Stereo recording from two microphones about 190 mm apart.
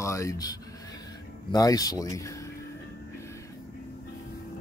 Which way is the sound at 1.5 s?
20° left (ahead or behind).